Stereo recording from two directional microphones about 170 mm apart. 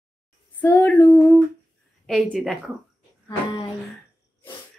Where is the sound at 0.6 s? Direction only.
10° left (ahead or behind).